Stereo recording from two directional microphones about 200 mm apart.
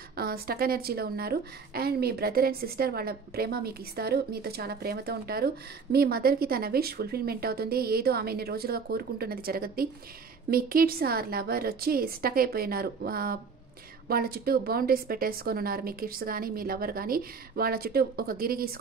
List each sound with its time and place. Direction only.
0.1 s a woman's voice: 50° right (ahead or behind)